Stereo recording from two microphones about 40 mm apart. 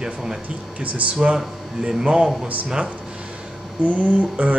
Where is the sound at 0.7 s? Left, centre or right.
Right.